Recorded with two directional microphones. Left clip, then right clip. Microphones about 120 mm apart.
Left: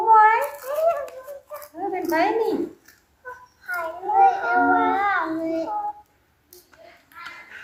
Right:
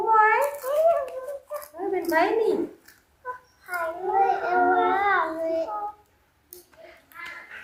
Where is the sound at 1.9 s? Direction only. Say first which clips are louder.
Left 1 dB; 15° right (ahead or behind).